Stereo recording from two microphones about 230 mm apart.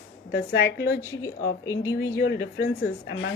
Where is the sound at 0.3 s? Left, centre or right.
Left.